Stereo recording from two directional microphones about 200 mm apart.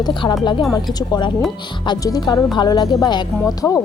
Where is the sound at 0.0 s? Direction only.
25° left (ahead or behind).